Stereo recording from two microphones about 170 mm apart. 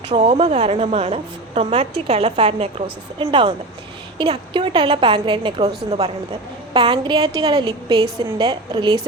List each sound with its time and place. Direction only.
0.1 s a woman's voice: 40° right (ahead or behind)